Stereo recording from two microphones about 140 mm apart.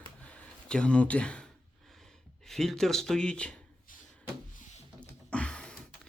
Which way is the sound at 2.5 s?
5° left (ahead or behind).